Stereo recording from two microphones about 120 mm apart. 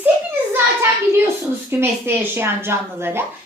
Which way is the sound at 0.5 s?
20° right (ahead or behind).